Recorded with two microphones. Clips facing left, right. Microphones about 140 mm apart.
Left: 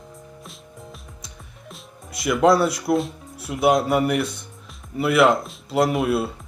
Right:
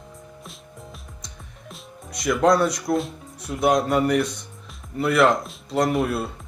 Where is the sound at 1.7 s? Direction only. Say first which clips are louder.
Right 1 dB; 5° left (ahead or behind).